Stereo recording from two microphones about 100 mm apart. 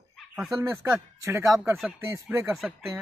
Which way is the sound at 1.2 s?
30° right (ahead or behind).